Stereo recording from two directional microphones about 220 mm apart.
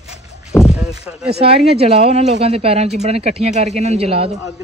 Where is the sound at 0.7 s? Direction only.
5° right (ahead or behind).